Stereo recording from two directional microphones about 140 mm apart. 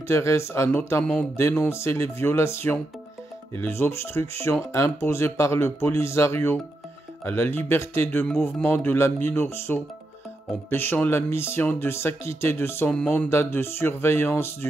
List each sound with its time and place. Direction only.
0.1 s speech: 20° left (ahead or behind)
8.3 s speech: centre (ahead or behind)
8.6 s speech: 15° left (ahead or behind)